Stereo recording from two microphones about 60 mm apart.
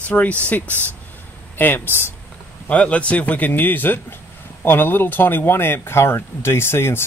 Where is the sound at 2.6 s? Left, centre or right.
Left.